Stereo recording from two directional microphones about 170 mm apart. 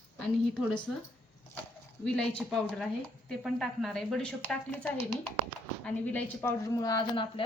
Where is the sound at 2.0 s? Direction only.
5° left (ahead or behind); by 7.4 s 30° left (ahead or behind).